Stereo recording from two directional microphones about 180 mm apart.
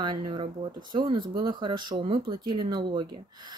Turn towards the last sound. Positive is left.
turn(degrees=-25)  # may be behind; listen again after turning